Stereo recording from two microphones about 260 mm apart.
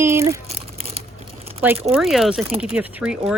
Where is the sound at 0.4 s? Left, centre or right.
Right.